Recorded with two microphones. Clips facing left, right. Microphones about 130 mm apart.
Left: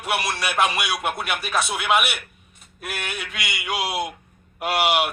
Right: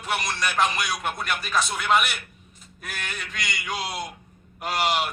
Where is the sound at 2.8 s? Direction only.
65° left (ahead or behind).